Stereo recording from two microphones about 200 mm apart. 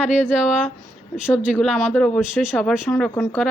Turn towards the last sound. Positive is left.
turn(degrees=0)  # may be behind; listen again after turning